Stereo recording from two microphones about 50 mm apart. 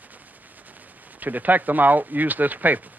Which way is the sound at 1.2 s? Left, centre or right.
Right.